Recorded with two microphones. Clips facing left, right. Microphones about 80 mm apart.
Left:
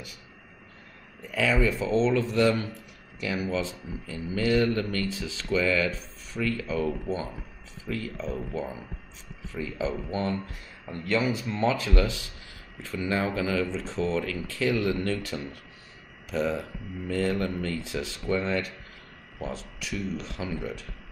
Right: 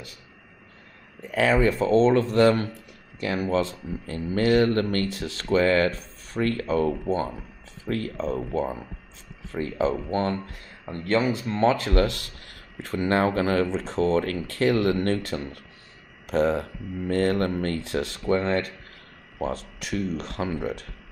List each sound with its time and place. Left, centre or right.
1.2 s speech: right
11.1 s speech: right